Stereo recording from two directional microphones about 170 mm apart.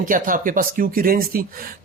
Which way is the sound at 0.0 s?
50° right (ahead or behind).